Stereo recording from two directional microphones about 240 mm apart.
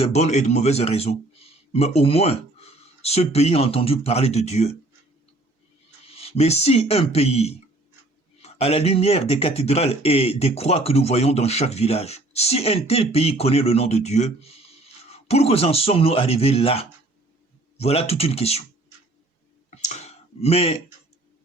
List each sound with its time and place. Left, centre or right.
0.0 s speech: left
6.1 s speech: left
19.7 s a sound: left